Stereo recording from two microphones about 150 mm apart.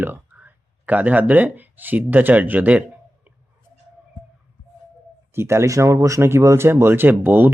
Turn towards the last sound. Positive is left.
turn(degrees=-15)  # may be behind; listen again after turning